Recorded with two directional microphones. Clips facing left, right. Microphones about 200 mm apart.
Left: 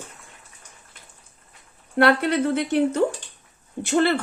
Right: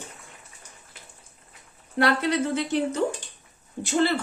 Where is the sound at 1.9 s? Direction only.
60° left (ahead or behind).